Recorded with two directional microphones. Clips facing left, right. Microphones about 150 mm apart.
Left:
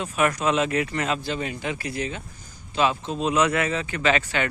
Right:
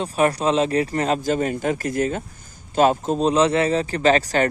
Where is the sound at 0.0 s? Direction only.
35° right (ahead or behind).